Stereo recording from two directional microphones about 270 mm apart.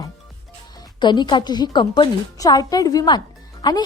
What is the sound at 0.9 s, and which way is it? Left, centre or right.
Speech, centre.